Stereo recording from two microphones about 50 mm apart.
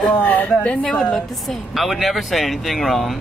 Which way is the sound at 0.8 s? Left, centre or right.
Centre.